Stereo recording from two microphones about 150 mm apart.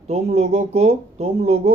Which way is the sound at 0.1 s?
45° right (ahead or behind).